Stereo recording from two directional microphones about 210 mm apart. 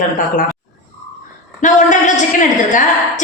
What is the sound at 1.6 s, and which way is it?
A woman's voice, 35° left (ahead or behind).